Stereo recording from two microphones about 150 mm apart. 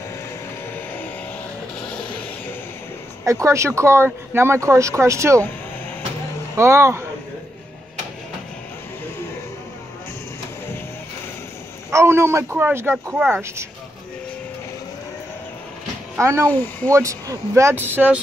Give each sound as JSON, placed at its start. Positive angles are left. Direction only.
{"t": 1.8, "sound": "a sound", "side_deg": 5}
{"t": 3.3, "sound": "speech", "side_deg": -20}
{"t": 6.5, "sound": "speech", "side_deg": -20}
{"t": 11.9, "sound": "speech", "side_deg": -20}
{"t": 16.2, "sound": "speech", "side_deg": -20}
{"t": 16.4, "sound": "speech", "side_deg": 10}
{"t": 16.9, "sound": "speech", "side_deg": -20}